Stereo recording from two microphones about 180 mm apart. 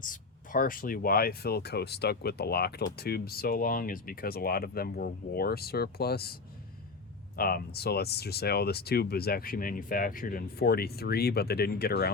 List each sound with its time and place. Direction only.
0.0 s speech: 50° left (ahead or behind)
7.3 s speech: 60° left (ahead or behind)